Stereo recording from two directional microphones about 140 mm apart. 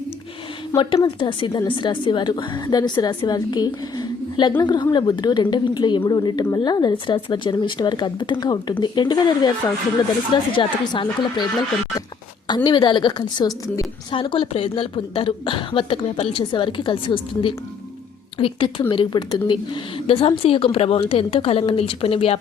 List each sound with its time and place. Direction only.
0.8 s a woman's voice: 40° left (ahead or behind)
12.5 s a woman's voice: 30° left (ahead or behind)